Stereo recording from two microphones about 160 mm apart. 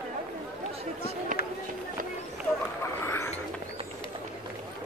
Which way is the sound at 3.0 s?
15° left (ahead or behind).